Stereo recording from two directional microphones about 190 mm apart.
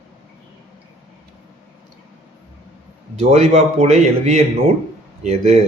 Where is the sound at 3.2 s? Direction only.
35° right (ahead or behind).